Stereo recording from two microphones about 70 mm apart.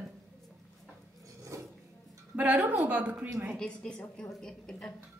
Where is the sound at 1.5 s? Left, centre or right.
Right.